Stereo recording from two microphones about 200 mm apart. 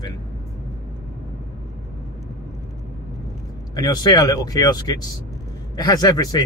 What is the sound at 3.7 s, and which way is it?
Speech, 20° left (ahead or behind).